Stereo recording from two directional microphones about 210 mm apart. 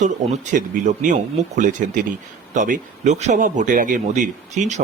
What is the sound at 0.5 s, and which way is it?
Speech, 40° right (ahead or behind).